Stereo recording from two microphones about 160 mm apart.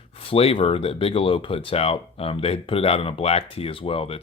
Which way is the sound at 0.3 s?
35° left (ahead or behind).